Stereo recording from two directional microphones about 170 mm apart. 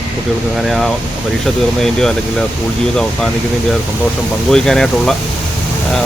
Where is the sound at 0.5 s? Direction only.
Centre (ahead or behind).